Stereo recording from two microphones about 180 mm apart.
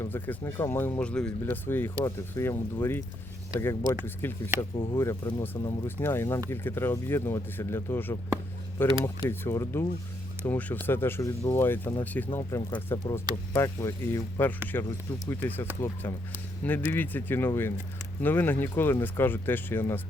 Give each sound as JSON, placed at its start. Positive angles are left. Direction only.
{"t": 0.0, "sound": "speech", "side_deg": 15}
{"t": 4.7, "sound": "speech", "side_deg": 25}
{"t": 16.6, "sound": "speech", "side_deg": 10}